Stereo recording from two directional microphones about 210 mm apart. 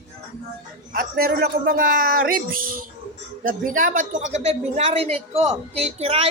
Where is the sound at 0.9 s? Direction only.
45° right (ahead or behind).